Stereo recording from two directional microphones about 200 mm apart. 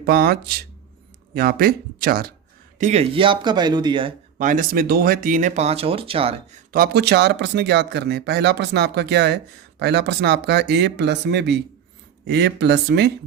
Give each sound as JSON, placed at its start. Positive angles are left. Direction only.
{"t": 0.0, "sound": "speech", "side_deg": -50}
{"t": 2.7, "sound": "speech", "side_deg": -35}
{"t": 4.4, "sound": "speech", "side_deg": -40}
{"t": 6.7, "sound": "speech", "side_deg": -50}